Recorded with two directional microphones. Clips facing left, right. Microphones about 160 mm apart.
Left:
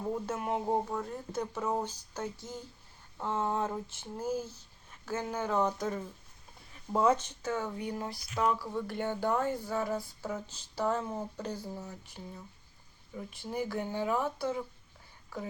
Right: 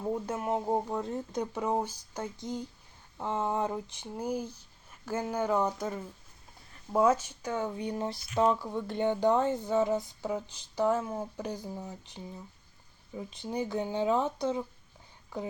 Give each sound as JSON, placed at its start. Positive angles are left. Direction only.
{"t": 0.0, "sound": "speech", "side_deg": -10}
{"t": 0.9, "sound": "speech", "side_deg": -20}